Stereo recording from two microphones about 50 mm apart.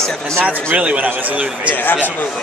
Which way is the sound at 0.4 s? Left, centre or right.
Right.